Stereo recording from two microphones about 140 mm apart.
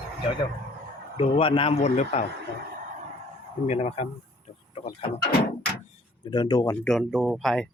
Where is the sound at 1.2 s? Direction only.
40° left (ahead or behind).